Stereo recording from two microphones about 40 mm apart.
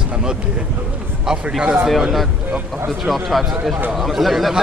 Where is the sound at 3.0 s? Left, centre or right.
Centre.